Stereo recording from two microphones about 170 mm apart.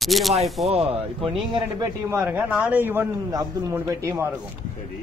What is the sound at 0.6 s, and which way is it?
A man's voice, 35° right (ahead or behind).